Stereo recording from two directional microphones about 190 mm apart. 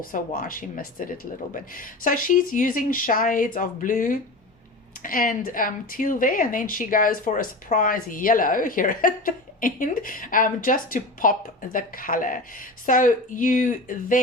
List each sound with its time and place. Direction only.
0.1 s speech: 45° left (ahead or behind)